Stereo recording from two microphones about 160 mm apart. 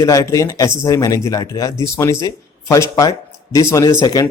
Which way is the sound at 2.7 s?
20° left (ahead or behind).